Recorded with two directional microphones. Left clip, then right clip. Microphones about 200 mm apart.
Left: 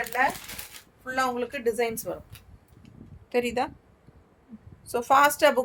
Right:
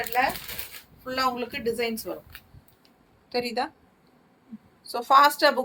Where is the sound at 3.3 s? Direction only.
35° left (ahead or behind).